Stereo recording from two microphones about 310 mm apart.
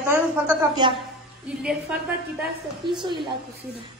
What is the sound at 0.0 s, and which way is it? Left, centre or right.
A woman's voice, centre.